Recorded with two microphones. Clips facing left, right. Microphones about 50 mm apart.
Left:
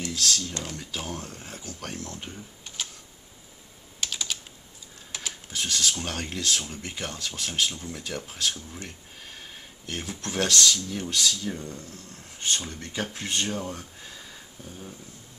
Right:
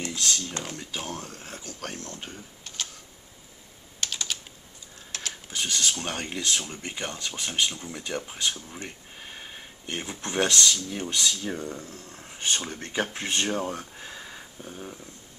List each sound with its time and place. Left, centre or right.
0.1 s speech: centre
2.2 s typing: centre
4.0 s typing: centre
5.5 s speech: centre
11.4 s speech: right
12.4 s speech: right
12.6 s speech: right
13.9 s a sound: right